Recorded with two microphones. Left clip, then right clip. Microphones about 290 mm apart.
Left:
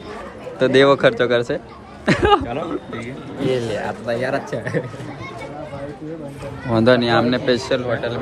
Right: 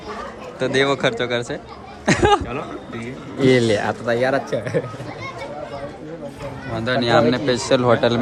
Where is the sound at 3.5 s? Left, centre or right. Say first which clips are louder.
Right 5 dB; right.